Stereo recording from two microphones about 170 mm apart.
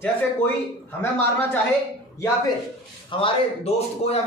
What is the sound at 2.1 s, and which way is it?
Speech, 20° left (ahead or behind).